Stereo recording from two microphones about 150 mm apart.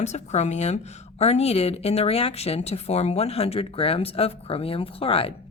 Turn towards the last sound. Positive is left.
turn(degrees=40)  # may be behind; listen again after turning